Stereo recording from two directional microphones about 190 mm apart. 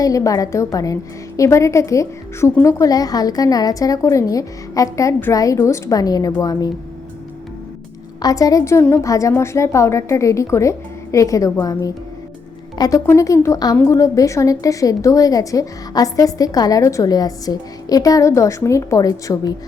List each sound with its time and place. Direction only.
0.0 s a woman's voice: 20° left (ahead or behind)
8.2 s a woman's voice: 20° left (ahead or behind)